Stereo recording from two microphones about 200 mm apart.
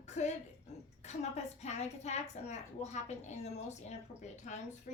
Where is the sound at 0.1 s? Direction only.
35° left (ahead or behind).